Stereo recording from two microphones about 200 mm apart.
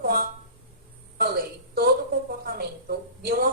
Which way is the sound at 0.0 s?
45° right (ahead or behind).